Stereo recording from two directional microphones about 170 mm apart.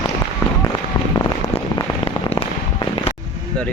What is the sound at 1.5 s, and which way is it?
Rain on surface, 35° left (ahead or behind).